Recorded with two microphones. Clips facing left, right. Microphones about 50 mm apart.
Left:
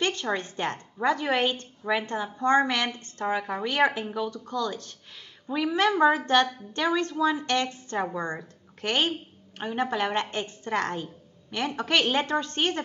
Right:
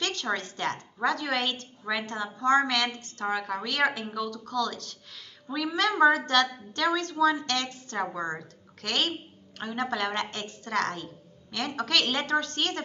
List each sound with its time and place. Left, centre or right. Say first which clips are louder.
0.0 s a woman's voice: left 3 dB; left